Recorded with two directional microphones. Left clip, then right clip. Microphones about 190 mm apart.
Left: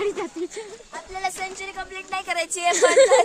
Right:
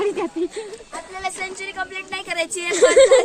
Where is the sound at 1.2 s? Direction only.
70° left (ahead or behind).